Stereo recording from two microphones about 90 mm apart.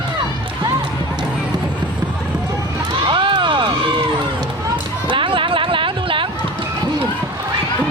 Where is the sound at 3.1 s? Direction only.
60° right (ahead or behind).